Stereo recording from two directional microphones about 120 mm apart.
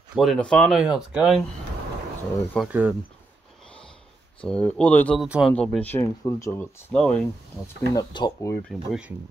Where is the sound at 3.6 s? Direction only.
5° left (ahead or behind).